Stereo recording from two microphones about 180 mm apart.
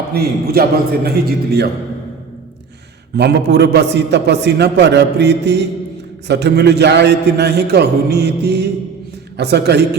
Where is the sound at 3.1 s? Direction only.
65° right (ahead or behind).